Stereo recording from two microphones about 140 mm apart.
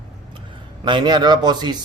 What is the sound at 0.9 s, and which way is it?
Speech, 35° right (ahead or behind).